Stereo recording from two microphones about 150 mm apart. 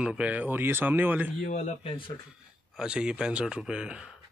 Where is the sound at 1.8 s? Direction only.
35° left (ahead or behind).